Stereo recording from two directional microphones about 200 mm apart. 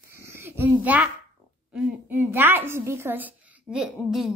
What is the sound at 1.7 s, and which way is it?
A woman's voice, 5° right (ahead or behind).